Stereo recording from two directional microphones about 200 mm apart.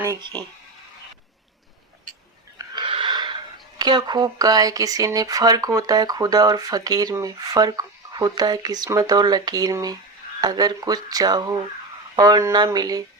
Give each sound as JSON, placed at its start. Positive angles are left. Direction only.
{"t": 0.0, "sound": "speech", "side_deg": -20}
{"t": 2.6, "sound": "a sound", "side_deg": -25}
{"t": 3.8, "sound": "speech", "side_deg": -20}